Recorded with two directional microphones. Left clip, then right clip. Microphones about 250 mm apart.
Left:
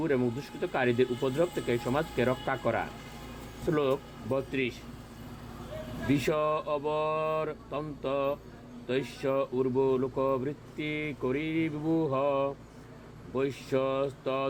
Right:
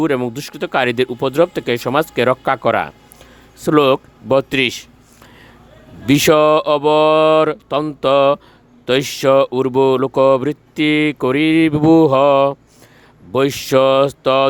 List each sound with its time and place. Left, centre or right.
0.0 s speech: right
6.1 s speech: right